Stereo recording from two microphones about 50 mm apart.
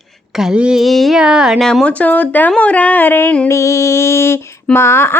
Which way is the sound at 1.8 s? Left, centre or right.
Left.